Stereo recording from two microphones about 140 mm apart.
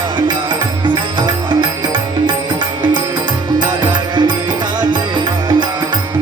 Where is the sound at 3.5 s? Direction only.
30° right (ahead or behind).